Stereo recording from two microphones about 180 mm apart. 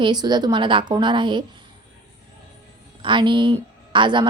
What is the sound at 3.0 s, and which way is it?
A woman's voice, 25° right (ahead or behind).